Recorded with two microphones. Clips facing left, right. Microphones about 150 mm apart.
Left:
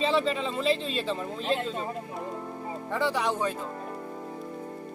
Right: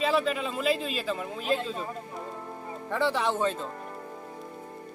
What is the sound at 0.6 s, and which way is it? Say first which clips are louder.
Speech: even; 30° left (ahead or behind).